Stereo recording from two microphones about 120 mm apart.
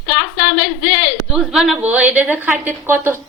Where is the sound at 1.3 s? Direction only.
5° right (ahead or behind).